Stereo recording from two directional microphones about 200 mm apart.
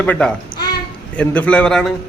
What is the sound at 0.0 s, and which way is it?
A man's voice, 5° left (ahead or behind).